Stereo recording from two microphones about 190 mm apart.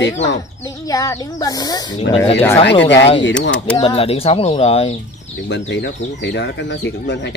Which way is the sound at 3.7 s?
30° left (ahead or behind).